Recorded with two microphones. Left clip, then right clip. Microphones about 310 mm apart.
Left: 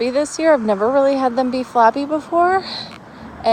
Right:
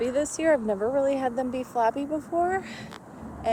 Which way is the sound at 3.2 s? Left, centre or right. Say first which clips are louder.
Left 10 dB; left.